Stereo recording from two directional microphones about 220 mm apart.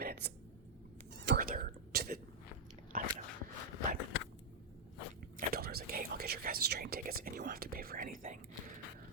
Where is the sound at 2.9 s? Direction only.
40° right (ahead or behind).